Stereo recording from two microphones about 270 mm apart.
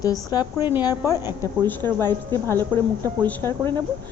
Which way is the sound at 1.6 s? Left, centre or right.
Centre.